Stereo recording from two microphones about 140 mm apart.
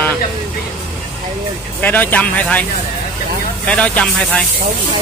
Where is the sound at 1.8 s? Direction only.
10° left (ahead or behind).